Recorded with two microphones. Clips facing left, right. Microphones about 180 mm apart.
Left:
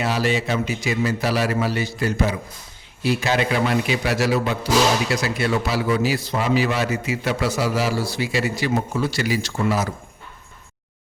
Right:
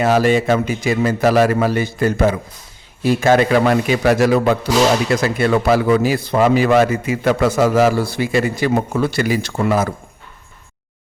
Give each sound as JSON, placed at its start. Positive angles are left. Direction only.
{"t": 0.0, "sound": "a man's voice", "side_deg": -50}